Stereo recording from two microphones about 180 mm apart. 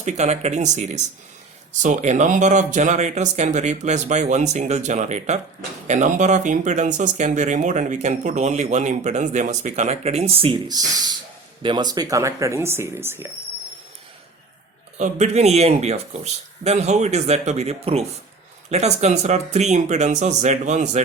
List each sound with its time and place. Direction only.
0.0 s speech: 40° right (ahead or behind); by 13.2 s 15° right (ahead or behind)
14.9 s speech: 40° right (ahead or behind)